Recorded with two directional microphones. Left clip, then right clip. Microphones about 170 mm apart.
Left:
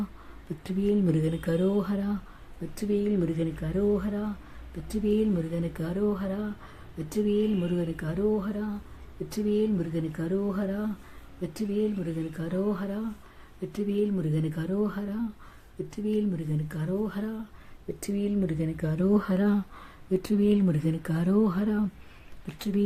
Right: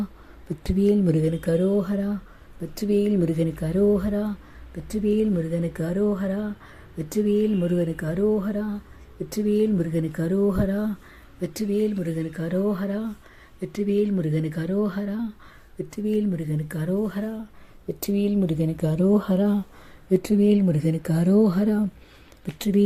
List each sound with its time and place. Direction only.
0.6 s speech: 25° right (ahead or behind)
2.7 s speech: 30° right (ahead or behind)
11.4 s speech: 20° right (ahead or behind)
18.0 s speech: 30° right (ahead or behind)
19.0 s speech: centre (ahead or behind)
20.1 s speech: 25° right (ahead or behind)